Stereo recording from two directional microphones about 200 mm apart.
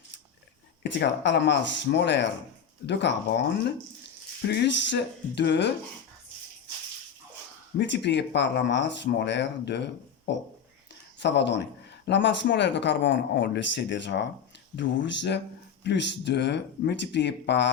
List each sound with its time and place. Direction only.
0.8 s speech: 60° left (ahead or behind)
7.8 s speech: 60° left (ahead or behind)